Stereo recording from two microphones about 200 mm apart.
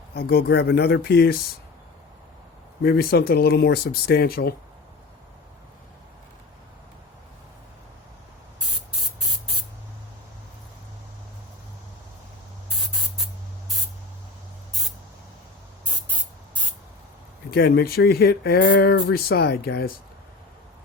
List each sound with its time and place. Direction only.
0.1 s speech: 50° left (ahead or behind)
2.8 s speech: 50° left (ahead or behind)
17.5 s speech: 55° left (ahead or behind)